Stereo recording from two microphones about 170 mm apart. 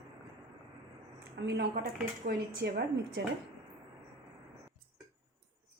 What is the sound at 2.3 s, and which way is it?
Speech, 70° right (ahead or behind).